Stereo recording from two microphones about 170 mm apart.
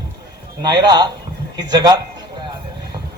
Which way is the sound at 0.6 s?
25° right (ahead or behind).